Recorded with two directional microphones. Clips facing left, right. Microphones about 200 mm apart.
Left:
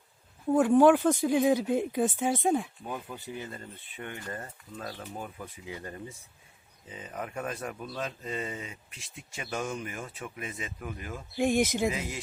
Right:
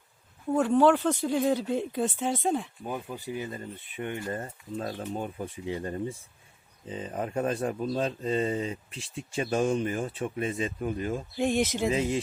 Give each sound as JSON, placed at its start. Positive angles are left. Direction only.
{"t": 0.5, "sound": "speech", "side_deg": 15}
{"t": 11.3, "sound": "speech", "side_deg": 10}
{"t": 11.9, "sound": "speech", "side_deg": -30}